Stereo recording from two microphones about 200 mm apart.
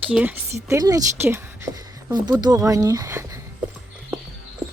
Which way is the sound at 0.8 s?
15° right (ahead or behind).